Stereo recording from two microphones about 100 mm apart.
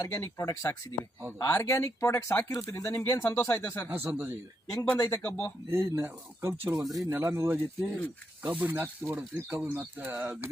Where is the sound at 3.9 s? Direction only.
25° right (ahead or behind).